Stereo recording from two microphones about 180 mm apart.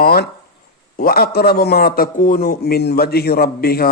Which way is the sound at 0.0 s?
55° left (ahead or behind).